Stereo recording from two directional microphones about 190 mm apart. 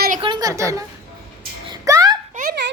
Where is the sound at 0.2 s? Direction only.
20° right (ahead or behind).